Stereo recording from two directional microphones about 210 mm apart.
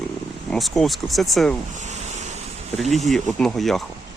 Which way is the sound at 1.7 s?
35° right (ahead or behind).